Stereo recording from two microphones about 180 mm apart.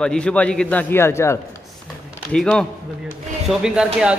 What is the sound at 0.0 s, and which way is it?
A man's voice, 5° left (ahead or behind).